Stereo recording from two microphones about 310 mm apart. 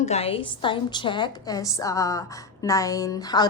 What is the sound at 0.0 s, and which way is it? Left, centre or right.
A woman's voice, centre.